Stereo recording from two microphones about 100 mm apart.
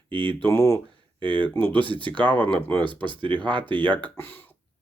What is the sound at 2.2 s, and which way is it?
Speech, 15° left (ahead or behind).